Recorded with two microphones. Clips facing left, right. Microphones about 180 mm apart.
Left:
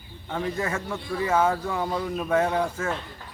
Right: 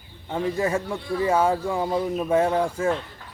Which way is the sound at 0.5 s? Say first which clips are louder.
Right 5 dB; 30° right (ahead or behind).